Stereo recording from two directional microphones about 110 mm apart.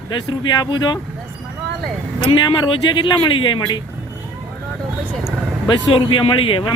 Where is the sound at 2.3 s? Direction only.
45° left (ahead or behind).